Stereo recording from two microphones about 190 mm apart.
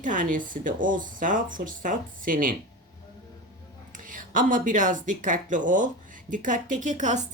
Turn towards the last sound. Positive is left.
turn(degrees=-40)  # may be behind; listen again after turning